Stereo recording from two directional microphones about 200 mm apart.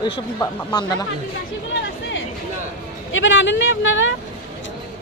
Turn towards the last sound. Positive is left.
turn(degrees=70)  # may be behind; listen again after turning